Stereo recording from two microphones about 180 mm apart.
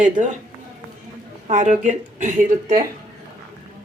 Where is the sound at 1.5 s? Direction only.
45° right (ahead or behind).